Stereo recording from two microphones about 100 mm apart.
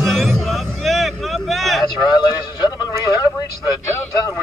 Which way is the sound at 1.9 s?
45° left (ahead or behind).